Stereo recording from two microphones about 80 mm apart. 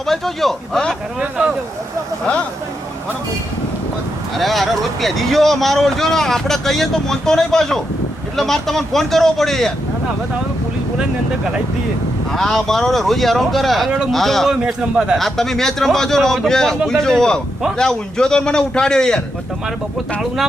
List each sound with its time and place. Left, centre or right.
0.0 s speech: centre
1.4 s a man's voice: centre
4.4 s speech: centre
12.3 s speech: centre
14.6 s a man's voice: centre
15.2 s a man's voice: centre